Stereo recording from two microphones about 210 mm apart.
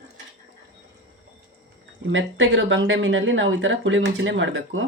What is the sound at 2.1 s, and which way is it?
Speech, 65° right (ahead or behind).